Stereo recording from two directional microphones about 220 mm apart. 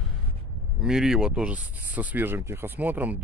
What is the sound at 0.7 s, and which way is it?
Speech, centre (ahead or behind).